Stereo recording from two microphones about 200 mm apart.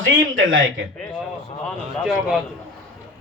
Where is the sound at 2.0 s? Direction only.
Centre (ahead or behind).